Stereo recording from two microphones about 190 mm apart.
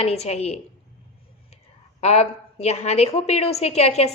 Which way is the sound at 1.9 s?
35° left (ahead or behind).